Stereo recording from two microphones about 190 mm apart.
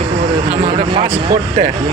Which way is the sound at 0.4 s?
30° right (ahead or behind).